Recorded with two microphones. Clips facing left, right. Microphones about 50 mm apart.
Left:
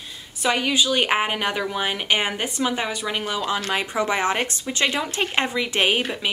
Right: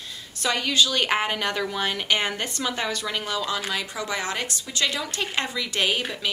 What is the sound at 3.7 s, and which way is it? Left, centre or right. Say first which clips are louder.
A woman's voice: left 6 dB; left.